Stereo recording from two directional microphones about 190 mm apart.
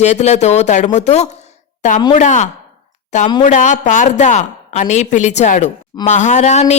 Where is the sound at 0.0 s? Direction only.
35° left (ahead or behind).